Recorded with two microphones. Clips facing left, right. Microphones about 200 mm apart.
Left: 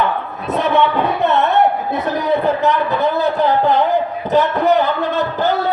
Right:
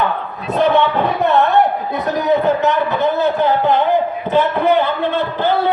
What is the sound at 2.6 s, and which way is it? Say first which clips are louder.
A man's voice: even; 35° left (ahead or behind).